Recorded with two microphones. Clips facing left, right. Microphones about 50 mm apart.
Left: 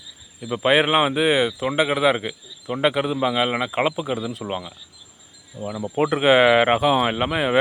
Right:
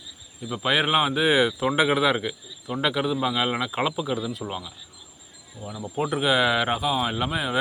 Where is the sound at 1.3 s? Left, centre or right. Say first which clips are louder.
Left 1 dB; centre.